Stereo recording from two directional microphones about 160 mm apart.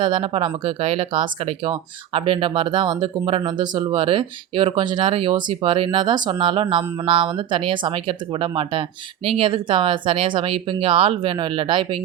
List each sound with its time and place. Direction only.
0.0 s speech: 30° right (ahead or behind)